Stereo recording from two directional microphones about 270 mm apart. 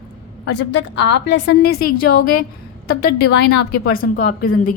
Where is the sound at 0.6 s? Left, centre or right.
Left.